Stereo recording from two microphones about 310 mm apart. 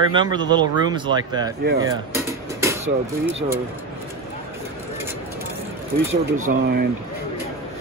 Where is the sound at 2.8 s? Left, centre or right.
Centre.